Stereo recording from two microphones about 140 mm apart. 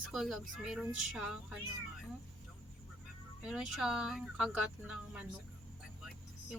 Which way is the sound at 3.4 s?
5° right (ahead or behind).